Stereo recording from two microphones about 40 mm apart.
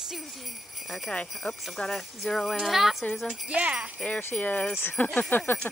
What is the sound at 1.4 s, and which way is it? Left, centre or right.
Jingle bell, left.